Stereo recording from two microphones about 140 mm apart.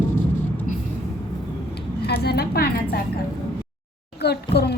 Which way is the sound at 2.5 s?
90° left.